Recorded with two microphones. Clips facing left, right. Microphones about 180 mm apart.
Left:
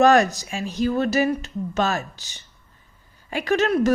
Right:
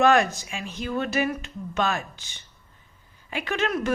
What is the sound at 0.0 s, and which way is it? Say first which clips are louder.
A woman's voice: left 4 dB; 40° left (ahead or behind).